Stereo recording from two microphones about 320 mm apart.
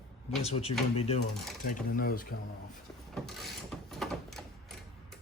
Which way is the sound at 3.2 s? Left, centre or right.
Centre.